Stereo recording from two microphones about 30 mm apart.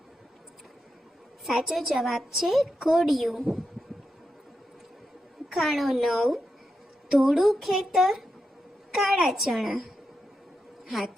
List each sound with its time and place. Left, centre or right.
1.5 s a woman's voice: centre
5.5 s a woman's voice: centre